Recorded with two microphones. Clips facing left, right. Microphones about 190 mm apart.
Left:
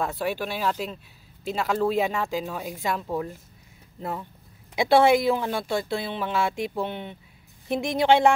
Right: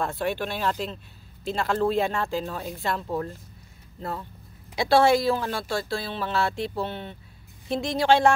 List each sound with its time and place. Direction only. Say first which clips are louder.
0.0 s speech: even; 5° left (ahead or behind)